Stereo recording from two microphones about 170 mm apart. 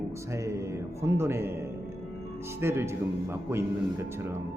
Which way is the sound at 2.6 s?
15° right (ahead or behind).